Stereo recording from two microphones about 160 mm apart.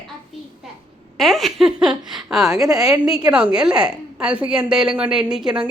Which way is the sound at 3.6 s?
5° right (ahead or behind).